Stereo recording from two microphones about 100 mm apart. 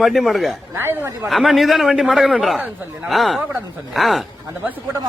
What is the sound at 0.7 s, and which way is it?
Speech, 20° right (ahead or behind).